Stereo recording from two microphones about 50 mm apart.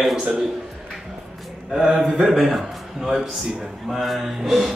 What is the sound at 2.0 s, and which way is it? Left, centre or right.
A man's voice, centre.